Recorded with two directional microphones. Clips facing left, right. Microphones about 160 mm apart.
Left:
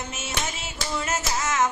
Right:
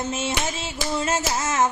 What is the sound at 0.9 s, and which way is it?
Music, 30° right (ahead or behind).